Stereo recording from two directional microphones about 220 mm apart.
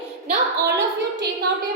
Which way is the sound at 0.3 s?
45° right (ahead or behind).